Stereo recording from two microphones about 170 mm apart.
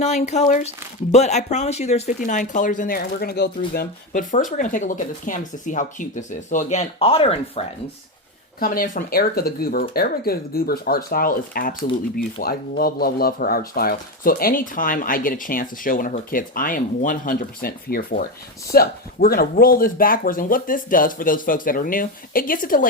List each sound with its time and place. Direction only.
0.0 s speech: 40° left (ahead or behind); by 3.5 s 70° left (ahead or behind)
3.8 s speech: 50° left (ahead or behind); by 7.6 s 35° left (ahead or behind)
8.5 s speech: 55° left (ahead or behind)